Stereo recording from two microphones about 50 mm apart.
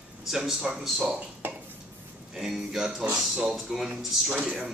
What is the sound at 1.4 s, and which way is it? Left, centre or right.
Dishes, right.